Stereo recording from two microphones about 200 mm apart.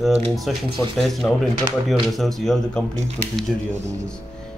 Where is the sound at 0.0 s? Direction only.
Centre (ahead or behind).